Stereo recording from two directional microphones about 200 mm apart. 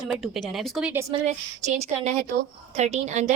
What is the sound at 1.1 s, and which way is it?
A woman's voice, 35° right (ahead or behind).